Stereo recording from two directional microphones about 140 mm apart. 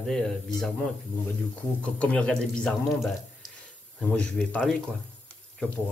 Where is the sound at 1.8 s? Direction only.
5° left (ahead or behind).